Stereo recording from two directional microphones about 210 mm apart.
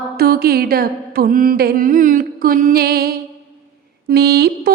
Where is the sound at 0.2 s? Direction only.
45° right (ahead or behind).